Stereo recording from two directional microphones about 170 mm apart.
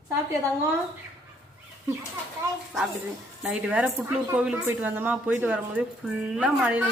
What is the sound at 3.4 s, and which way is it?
Speech, 5° right (ahead or behind).